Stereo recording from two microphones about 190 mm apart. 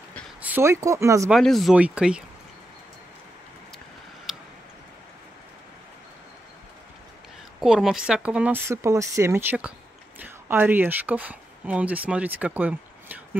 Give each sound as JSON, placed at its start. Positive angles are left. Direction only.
{"t": 0.4, "sound": "speech", "side_deg": -10}
{"t": 1.3, "sound": "speech", "side_deg": 0}
{"t": 4.3, "sound": "tick", "side_deg": -5}
{"t": 7.6, "sound": "speech", "side_deg": -5}